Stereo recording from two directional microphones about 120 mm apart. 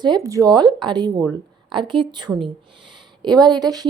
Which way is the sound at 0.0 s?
35° right (ahead or behind).